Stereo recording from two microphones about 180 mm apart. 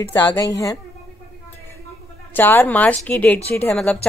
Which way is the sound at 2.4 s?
10° left (ahead or behind).